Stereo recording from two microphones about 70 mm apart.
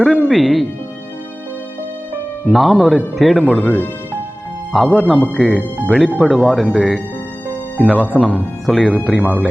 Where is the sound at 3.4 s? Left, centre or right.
Centre.